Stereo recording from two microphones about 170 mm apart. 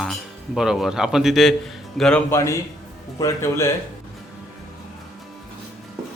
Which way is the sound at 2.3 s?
15° left (ahead or behind).